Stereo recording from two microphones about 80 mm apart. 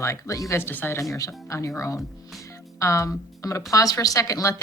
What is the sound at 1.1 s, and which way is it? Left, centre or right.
Speech, left.